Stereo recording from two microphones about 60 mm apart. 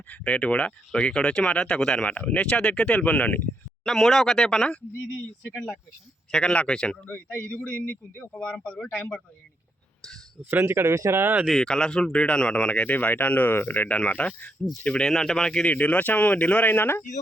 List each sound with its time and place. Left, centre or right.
0.1 s speech: left
3.8 s speech: centre
6.3 s speech: centre
7.0 s speech: left
10.0 s a sound: centre
10.5 s speech: right
11.2 s speech: right
11.4 s speech: centre; by 14.5 s left
14.6 s speech: centre
15.7 s speech: left